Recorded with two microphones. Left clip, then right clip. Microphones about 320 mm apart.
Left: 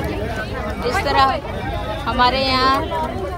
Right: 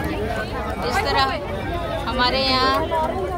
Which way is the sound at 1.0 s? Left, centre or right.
Centre.